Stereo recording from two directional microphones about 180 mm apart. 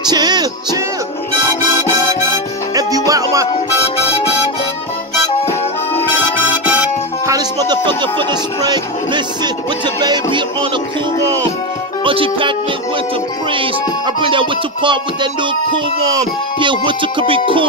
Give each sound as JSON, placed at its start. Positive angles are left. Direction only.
{"t": 0.1, "sound": "music", "side_deg": -20}
{"t": 2.2, "sound": "music", "side_deg": -15}
{"t": 7.2, "sound": "speech", "side_deg": -20}
{"t": 10.0, "sound": "music", "side_deg": -25}
{"t": 12.0, "sound": "music", "side_deg": -30}
{"t": 16.5, "sound": "music", "side_deg": -25}